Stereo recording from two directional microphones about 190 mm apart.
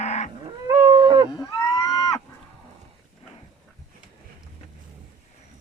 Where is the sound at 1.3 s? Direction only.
15° left (ahead or behind).